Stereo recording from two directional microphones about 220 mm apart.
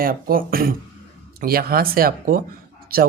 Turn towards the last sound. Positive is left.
turn(degrees=-45)  # may be behind; listen again after turning